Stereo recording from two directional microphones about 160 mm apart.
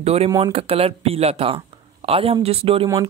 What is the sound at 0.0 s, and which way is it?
Speech, 40° right (ahead or behind).